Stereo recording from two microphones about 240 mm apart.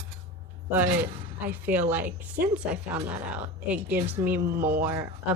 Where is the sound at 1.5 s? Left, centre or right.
Centre.